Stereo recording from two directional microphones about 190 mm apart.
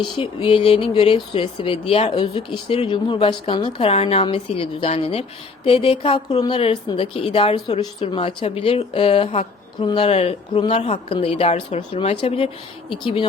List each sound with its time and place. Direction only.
0.0 s speech: 25° left (ahead or behind)